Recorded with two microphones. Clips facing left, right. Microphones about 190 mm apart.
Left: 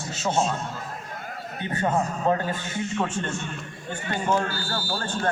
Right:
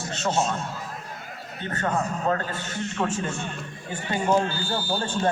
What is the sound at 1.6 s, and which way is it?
A man's voice, 15° left (ahead or behind).